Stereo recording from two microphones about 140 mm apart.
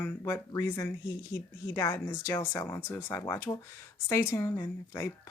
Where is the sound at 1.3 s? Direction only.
20° left (ahead or behind).